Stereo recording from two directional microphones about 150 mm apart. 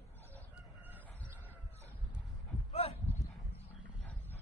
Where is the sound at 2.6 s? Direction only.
40° left (ahead or behind).